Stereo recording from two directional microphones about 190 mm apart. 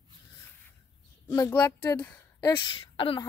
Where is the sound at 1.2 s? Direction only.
15° left (ahead or behind).